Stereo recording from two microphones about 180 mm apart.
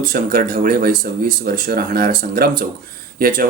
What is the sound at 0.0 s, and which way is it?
Speech, 50° right (ahead or behind).